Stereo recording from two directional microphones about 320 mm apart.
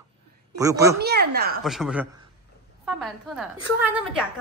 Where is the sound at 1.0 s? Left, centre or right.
Right.